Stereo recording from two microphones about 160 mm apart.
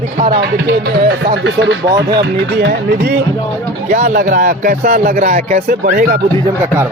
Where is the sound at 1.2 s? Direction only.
90° right.